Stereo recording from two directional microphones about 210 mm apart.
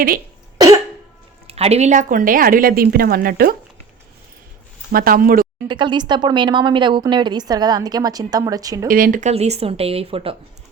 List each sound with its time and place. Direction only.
0.6 s cough: 20° right (ahead or behind)
1.5 s a woman's voice: 30° right (ahead or behind); by 3.5 s 45° right (ahead or behind)
4.9 s speech: 45° right (ahead or behind)
5.6 s speech: 20° right (ahead or behind)
8.9 s speech: 40° right (ahead or behind)